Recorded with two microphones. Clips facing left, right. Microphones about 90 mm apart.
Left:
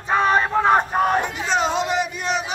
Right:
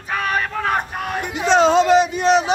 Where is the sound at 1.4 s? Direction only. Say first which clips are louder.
Right 7 dB; 85° right.